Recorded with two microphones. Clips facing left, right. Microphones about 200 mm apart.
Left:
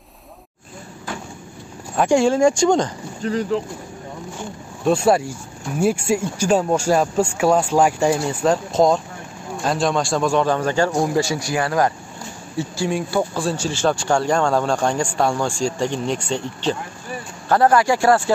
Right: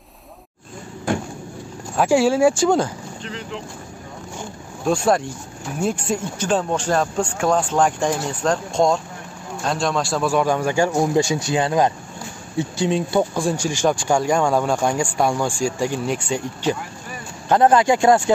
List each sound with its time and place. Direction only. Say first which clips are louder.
2.0 s a man's voice: even; 5° right (ahead or behind)
3.2 s speech: left 13 dB; 40° left (ahead or behind)
4.8 s a man's voice: left 2 dB; 5° left (ahead or behind)
17.5 s speech: right 1 dB; 20° right (ahead or behind)